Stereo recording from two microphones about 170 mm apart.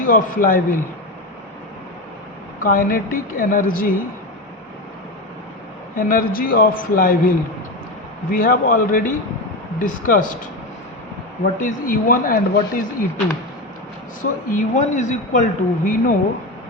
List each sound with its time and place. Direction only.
0.1 s speech: 55° left (ahead or behind)
2.6 s speech: 55° left (ahead or behind)
6.0 s speech: 55° left (ahead or behind)
11.6 s speech: 55° left (ahead or behind)
14.2 s speech: 45° left (ahead or behind)